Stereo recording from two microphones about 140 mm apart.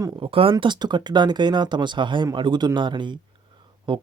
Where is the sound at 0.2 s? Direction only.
40° right (ahead or behind).